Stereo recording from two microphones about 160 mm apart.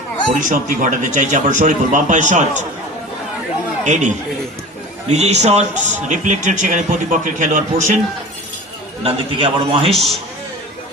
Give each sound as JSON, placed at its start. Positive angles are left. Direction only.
{"t": 0.3, "sound": "a man's voice", "side_deg": -55}
{"t": 3.8, "sound": "a man's voice", "side_deg": -50}
{"t": 9.0, "sound": "a man's voice", "side_deg": -35}
{"t": 9.9, "sound": "a man's voice", "side_deg": 0}